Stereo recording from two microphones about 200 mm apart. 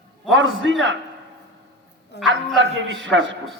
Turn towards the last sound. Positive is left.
turn(degrees=-65)  # may be behind; listen again after turning